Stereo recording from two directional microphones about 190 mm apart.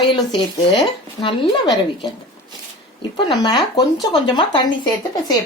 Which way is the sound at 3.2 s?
25° left (ahead or behind).